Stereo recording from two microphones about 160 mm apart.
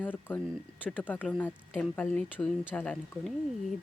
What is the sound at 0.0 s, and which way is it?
Speech, 10° left (ahead or behind).